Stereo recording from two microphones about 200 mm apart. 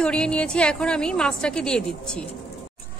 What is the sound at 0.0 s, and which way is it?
A woman's voice, 5° left (ahead or behind).